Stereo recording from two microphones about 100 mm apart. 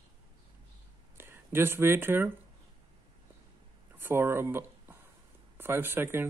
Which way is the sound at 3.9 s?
20° right (ahead or behind).